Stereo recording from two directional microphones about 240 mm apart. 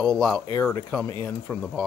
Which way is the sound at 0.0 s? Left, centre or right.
Centre.